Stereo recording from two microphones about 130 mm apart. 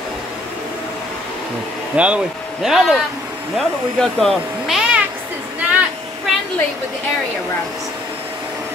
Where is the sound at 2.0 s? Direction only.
10° right (ahead or behind).